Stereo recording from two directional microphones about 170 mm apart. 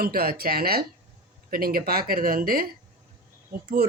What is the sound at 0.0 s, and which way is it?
Speech, 60° right (ahead or behind).